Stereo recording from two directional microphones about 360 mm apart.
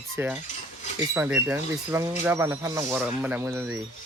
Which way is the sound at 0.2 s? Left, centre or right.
Centre.